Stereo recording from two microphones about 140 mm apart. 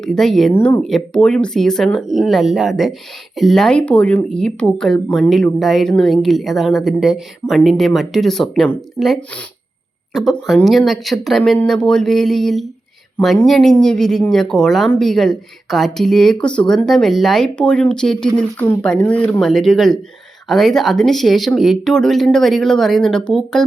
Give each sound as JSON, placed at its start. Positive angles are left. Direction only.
{"t": 0.0, "sound": "speech", "side_deg": 5}
{"t": 0.5, "sound": "speech", "side_deg": 15}
{"t": 0.8, "sound": "speech", "side_deg": 5}